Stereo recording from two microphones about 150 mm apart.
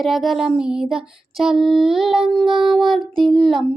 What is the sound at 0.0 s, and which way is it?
Child singing, centre (ahead or behind).